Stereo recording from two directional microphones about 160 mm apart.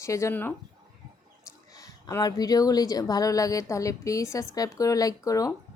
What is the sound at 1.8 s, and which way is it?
Speech, 25° left (ahead or behind).